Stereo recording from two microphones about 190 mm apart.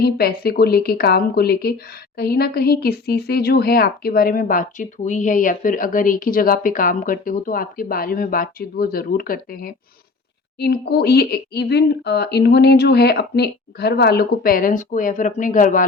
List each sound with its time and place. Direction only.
0.0 s speech: 55° left (ahead or behind)